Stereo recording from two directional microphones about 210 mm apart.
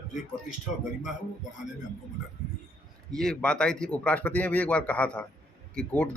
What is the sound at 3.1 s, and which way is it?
A man's voice, 5° left (ahead or behind).